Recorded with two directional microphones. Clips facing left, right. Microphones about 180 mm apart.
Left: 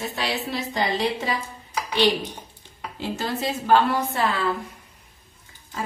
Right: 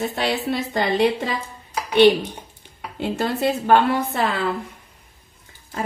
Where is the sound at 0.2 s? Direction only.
55° right (ahead or behind).